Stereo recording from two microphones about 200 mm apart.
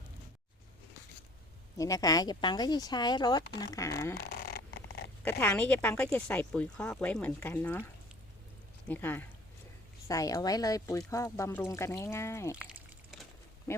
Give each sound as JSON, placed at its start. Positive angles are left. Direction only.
{"t": 1.8, "sound": "speech", "side_deg": 15}
{"t": 4.2, "sound": "dog", "side_deg": 55}
{"t": 5.2, "sound": "speech", "side_deg": 10}
{"t": 8.9, "sound": "speech", "side_deg": 10}
{"t": 13.7, "sound": "speech", "side_deg": 15}